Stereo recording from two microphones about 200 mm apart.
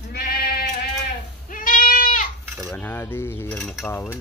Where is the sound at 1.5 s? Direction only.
45° left (ahead or behind).